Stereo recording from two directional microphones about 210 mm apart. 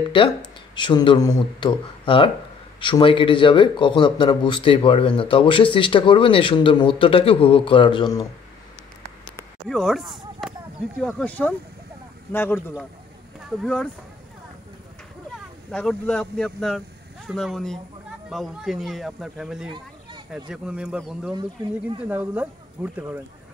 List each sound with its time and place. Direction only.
0.7 s speech: 20° left (ahead or behind)
9.7 s speech: centre (ahead or behind)
15.3 s speech: 5° left (ahead or behind)
19.7 s children playing: 20° right (ahead or behind)
20.2 s speech: 5° right (ahead or behind)